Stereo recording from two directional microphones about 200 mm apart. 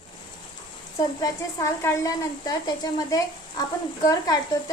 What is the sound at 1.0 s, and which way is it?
A woman's voice, 15° left (ahead or behind).